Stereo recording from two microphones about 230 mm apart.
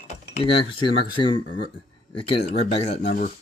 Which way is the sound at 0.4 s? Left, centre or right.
Left.